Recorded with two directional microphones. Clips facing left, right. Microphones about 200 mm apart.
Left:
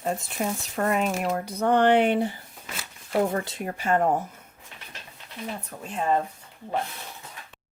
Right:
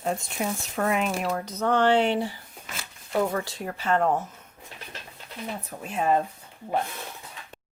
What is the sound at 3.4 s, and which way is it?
Speech, 20° left (ahead or behind).